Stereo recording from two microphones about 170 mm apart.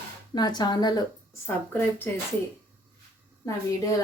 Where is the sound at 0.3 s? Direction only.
25° left (ahead or behind).